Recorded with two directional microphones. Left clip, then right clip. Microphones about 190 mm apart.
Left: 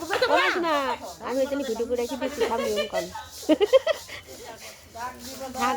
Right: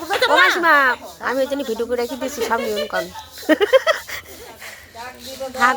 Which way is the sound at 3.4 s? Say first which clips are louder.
Right 5 dB; 40° right (ahead or behind).